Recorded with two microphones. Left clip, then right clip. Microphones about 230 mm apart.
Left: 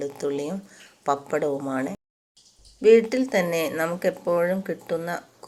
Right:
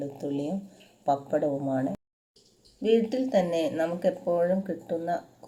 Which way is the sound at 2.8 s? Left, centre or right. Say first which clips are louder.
Left 8 dB; left.